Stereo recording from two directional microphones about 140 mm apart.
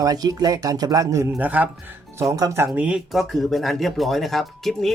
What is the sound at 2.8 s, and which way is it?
Speech, 5° right (ahead or behind).